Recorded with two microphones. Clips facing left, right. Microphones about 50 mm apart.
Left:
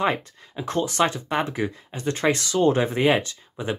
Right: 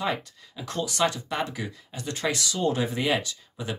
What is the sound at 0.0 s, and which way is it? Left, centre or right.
Speech, left.